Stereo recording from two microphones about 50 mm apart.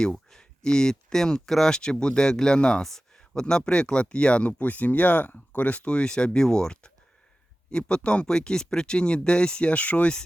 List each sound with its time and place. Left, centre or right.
0.0 s speech: centre